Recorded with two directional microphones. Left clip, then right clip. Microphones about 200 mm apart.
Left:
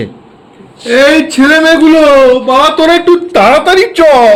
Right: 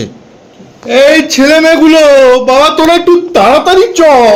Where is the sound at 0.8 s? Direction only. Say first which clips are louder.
Right 1 dB; 25° left (ahead or behind).